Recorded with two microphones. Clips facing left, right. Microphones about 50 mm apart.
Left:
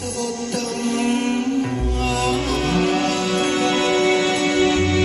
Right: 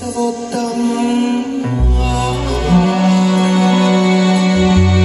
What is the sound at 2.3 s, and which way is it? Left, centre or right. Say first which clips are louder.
Music: right 4 dB; left.